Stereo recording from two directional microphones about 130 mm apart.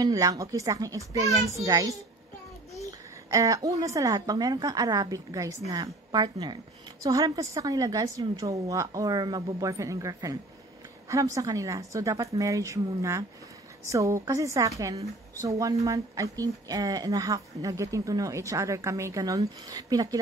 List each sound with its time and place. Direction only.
0.0 s a woman's voice: 25° right (ahead or behind)